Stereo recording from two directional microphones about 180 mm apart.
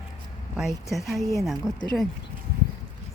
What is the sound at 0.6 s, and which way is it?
Speech, centre (ahead or behind).